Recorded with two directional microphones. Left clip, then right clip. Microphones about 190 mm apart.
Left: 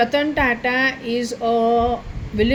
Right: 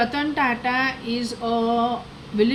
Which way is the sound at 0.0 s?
25° left (ahead or behind).